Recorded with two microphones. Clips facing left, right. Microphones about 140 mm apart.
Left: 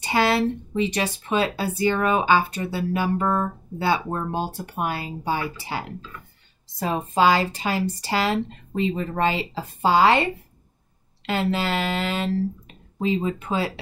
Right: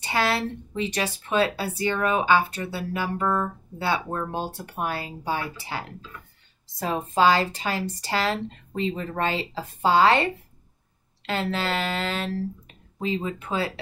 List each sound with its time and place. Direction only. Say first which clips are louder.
0.0 s speech: left 4 dB; 15° left (ahead or behind)
11.2 s speech: left 3 dB; 10° left (ahead or behind)